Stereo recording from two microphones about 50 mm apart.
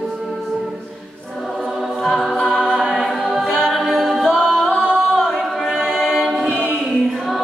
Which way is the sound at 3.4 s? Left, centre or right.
Centre.